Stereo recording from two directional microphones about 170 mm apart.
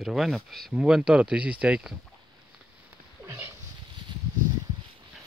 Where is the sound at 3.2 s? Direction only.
15° right (ahead or behind).